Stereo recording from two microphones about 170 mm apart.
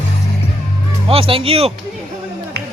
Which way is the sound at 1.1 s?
35° right (ahead or behind).